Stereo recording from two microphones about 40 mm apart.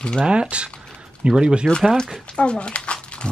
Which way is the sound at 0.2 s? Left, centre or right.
Right.